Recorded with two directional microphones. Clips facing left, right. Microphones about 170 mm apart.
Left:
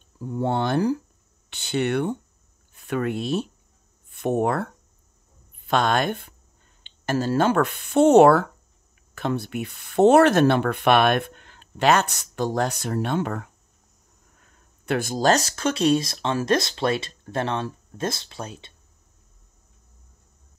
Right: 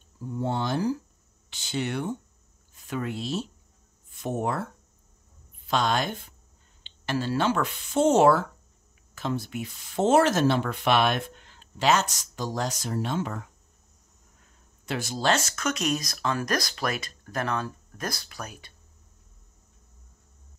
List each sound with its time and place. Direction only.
0.3 s speech: 60° left (ahead or behind)
5.7 s speech: 55° left (ahead or behind)
6.8 s speech: 45° left (ahead or behind); by 13.5 s 60° left (ahead or behind)
14.9 s speech: 55° left (ahead or behind); by 18.7 s 25° left (ahead or behind)